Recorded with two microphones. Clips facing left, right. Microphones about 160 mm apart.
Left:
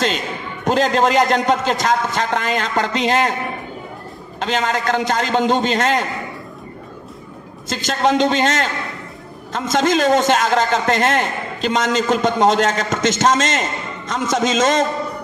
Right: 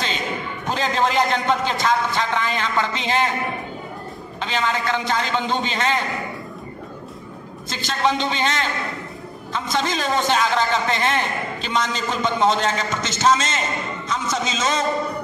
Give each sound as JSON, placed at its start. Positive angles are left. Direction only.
{"t": 0.7, "sound": "a man's voice", "side_deg": 45}
{"t": 4.4, "sound": "a man's voice", "side_deg": 45}
{"t": 7.7, "sound": "a man's voice", "side_deg": 45}